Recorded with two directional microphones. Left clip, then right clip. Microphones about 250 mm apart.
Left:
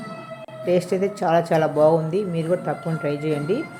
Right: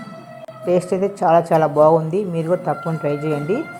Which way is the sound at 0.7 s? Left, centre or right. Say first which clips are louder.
Right 3 dB; centre.